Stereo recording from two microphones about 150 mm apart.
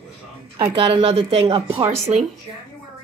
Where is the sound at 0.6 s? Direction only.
35° right (ahead or behind).